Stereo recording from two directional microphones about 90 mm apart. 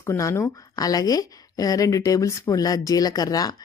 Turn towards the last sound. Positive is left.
turn(degrees=45)  # may be behind; listen again after turning